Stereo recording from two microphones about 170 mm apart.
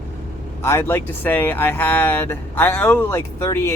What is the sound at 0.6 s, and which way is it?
Speech, 15° left (ahead or behind).